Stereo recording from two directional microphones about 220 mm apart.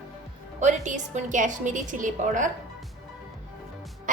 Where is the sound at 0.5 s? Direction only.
35° right (ahead or behind).